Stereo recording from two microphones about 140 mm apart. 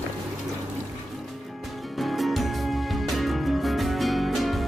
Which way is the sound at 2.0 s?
Centre (ahead or behind).